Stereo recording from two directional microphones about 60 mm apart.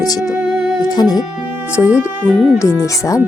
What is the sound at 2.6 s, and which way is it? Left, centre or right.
Speech, left.